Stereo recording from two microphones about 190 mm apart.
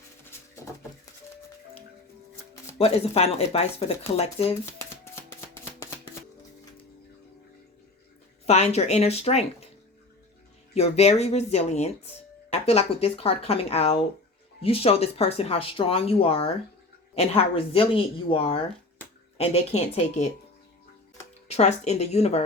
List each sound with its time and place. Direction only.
2.7 s speech: 35° left (ahead or behind)
8.4 s speech: 35° left (ahead or behind)
10.8 s speech: 35° left (ahead or behind)
21.4 s speech: 35° left (ahead or behind)